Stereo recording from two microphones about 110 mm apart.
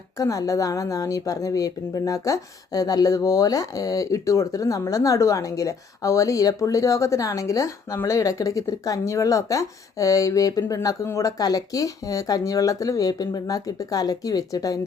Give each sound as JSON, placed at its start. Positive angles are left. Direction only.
{"t": 0.2, "sound": "a woman's voice", "side_deg": 30}